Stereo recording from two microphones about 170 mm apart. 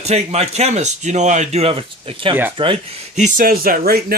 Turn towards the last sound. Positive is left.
turn(degrees=-60)  # may be behind; listen again after turning